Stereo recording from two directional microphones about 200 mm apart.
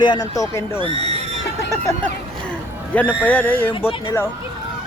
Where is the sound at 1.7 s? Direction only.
10° left (ahead or behind).